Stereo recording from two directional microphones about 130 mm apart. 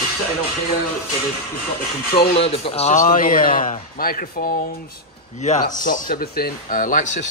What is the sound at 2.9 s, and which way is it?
Speech, 90° left.